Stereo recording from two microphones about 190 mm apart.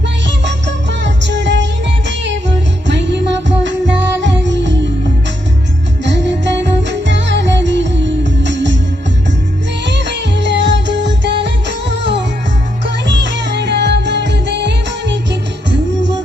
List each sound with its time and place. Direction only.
0.4 s music: 70° right (ahead or behind)
6.1 s music: 70° right (ahead or behind)
9.8 s music: 65° right (ahead or behind)
13.3 s music: 65° right (ahead or behind)